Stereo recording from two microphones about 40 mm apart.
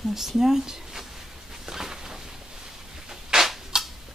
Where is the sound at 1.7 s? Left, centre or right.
Centre.